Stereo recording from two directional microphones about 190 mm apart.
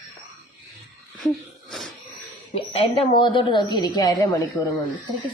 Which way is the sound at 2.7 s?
30° left (ahead or behind).